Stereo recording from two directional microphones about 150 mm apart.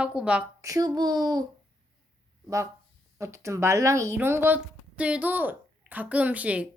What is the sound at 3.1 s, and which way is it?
Speech, 20° right (ahead or behind).